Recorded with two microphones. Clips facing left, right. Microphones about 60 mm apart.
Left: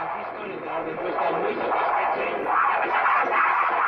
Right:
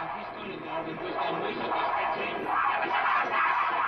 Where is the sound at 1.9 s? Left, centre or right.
Left.